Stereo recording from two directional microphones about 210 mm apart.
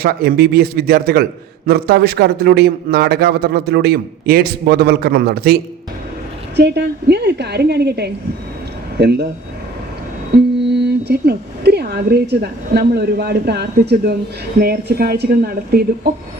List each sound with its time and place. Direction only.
0.0 s a man's voice: 50° right (ahead or behind)
6.6 s a man's voice: 55° right (ahead or behind)
10.3 s a man's voice: 50° right (ahead or behind)